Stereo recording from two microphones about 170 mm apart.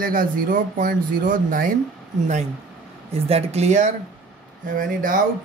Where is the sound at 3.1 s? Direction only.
35° right (ahead or behind); by 5.2 s 55° right (ahead or behind).